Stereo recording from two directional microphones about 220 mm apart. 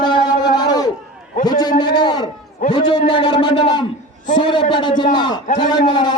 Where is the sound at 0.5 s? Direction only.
20° left (ahead or behind).